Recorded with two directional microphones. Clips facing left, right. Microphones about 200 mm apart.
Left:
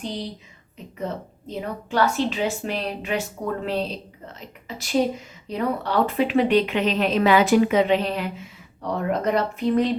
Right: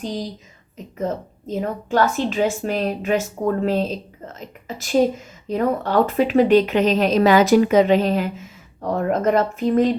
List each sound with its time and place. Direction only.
0.9 s speech: 45° right (ahead or behind)